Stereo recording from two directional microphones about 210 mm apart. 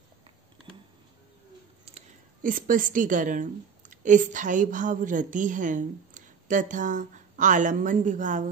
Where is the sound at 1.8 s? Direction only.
35° right (ahead or behind).